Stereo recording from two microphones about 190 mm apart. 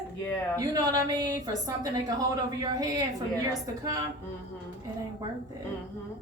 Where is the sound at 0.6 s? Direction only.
20° right (ahead or behind).